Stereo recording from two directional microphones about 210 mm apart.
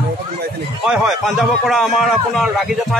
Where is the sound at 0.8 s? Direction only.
5° right (ahead or behind).